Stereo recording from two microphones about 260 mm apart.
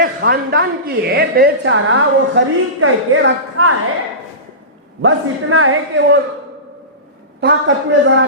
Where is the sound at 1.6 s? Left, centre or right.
Right.